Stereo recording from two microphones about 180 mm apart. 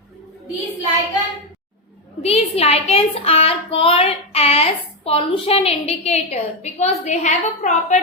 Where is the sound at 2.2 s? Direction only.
35° left (ahead or behind).